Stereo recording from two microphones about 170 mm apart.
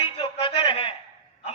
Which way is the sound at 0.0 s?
30° left (ahead or behind).